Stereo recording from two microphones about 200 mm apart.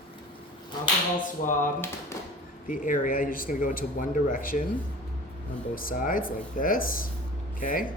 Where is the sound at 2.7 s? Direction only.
40° left (ahead or behind).